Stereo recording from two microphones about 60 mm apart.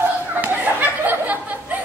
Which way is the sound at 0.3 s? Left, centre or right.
Right.